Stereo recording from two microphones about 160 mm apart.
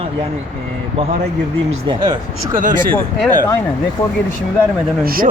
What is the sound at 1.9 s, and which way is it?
Speech, 30° right (ahead or behind).